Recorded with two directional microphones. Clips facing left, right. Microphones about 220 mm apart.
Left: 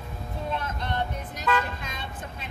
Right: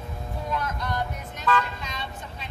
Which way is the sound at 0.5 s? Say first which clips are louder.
Right 2 dB; 25° left (ahead or behind).